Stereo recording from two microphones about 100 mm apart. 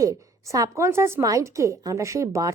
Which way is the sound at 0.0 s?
30° right (ahead or behind).